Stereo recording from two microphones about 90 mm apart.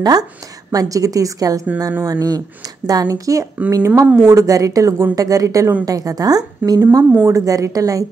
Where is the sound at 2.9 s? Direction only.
40° right (ahead or behind).